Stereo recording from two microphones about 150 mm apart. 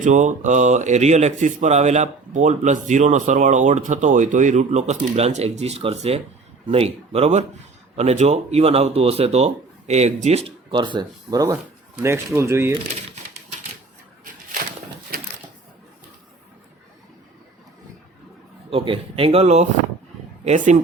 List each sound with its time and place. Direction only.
0.0 s speech: 55° right (ahead or behind); by 12.7 s 15° right (ahead or behind)
15.1 s crushing: 90° right
18.7 s speech: 40° right (ahead or behind)